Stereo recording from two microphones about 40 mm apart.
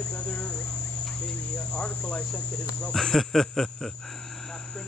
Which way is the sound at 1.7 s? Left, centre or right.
Left.